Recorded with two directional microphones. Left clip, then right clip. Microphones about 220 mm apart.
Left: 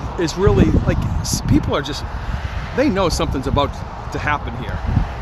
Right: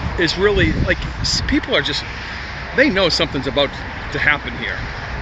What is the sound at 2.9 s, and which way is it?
Speech, 50° left (ahead or behind).